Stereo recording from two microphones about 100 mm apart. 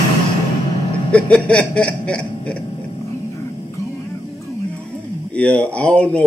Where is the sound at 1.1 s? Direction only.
10° left (ahead or behind).